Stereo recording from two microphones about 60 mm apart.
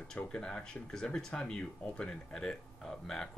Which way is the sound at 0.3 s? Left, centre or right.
Centre.